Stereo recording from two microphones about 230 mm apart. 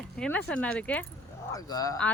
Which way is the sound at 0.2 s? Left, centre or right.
Centre.